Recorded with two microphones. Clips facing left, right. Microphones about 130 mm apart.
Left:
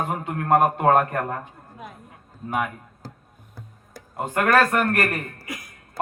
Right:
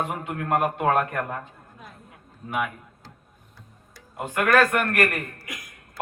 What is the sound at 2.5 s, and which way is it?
A man's voice, 40° left (ahead or behind).